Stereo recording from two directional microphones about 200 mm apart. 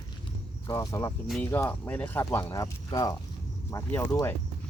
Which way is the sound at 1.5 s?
10° left (ahead or behind).